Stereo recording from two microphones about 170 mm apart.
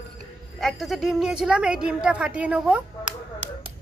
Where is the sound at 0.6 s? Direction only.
Centre (ahead or behind).